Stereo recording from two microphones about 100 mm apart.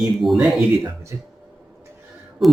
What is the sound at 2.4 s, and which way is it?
Speech, centre (ahead or behind).